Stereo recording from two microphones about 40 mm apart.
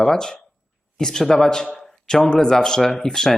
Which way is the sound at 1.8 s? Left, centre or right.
Centre.